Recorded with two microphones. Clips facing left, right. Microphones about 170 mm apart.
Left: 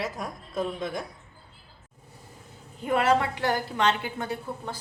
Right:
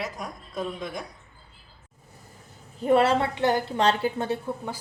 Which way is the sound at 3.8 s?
35° right (ahead or behind).